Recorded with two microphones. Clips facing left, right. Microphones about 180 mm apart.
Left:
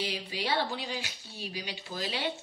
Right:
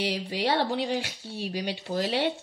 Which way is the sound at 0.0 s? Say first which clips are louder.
Right 6 dB; 75° right (ahead or behind).